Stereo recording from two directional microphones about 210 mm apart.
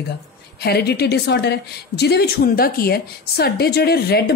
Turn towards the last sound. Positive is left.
turn(degrees=50)  # may be behind; listen again after turning